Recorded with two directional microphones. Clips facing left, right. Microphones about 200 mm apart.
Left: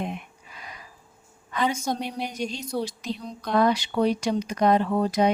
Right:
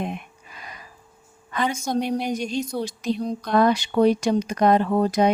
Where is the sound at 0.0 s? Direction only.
55° right (ahead or behind).